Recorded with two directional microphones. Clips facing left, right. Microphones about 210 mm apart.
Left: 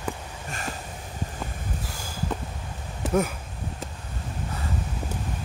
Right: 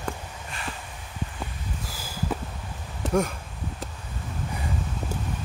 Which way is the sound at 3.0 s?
5° left (ahead or behind).